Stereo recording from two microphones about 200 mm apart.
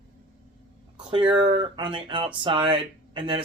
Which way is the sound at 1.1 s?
25° right (ahead or behind).